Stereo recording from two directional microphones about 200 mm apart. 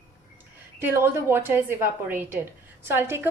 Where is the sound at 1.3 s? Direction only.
10° right (ahead or behind).